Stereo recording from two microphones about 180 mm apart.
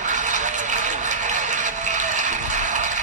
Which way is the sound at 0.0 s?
40° right (ahead or behind).